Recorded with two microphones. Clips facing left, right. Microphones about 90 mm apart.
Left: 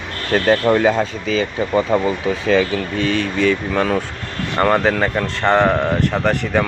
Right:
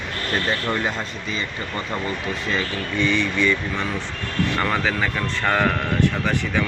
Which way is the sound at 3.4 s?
75° left (ahead or behind).